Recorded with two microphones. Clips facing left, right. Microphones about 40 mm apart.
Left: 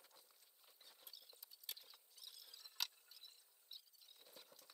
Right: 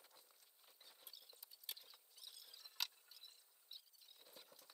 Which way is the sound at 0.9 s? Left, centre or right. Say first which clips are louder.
Even; centre.